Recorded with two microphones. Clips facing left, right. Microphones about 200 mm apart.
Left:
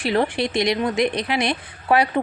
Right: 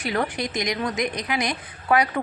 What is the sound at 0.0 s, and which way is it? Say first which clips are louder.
A woman's voice: left 5 dB; 30° left (ahead or behind).